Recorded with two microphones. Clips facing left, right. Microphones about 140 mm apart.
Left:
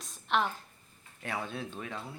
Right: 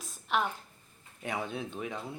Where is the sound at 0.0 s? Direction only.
5° right (ahead or behind).